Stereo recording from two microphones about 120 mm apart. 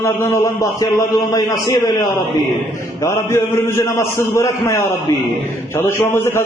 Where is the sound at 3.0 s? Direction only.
25° left (ahead or behind).